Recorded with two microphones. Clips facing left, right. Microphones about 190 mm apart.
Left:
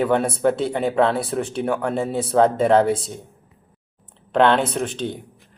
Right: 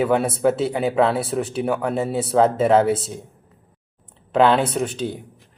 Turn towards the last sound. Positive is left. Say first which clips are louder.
# right 1 dB
turn(degrees=-5)  # may be behind; listen again after turning